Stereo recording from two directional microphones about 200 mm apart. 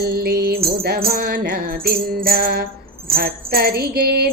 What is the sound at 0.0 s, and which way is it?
Music, 50° right (ahead or behind).